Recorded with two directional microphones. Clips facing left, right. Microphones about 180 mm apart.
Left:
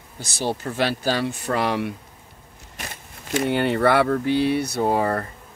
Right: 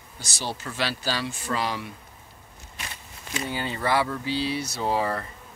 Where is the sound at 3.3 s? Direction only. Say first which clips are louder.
Left 10 dB; 65° left (ahead or behind).